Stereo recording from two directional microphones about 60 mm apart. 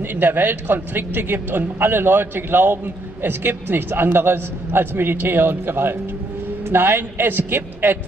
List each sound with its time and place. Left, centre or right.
0.1 s a man's voice: right